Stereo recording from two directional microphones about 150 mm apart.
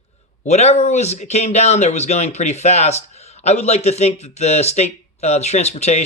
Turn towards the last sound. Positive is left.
turn(degrees=45)  # may be behind; listen again after turning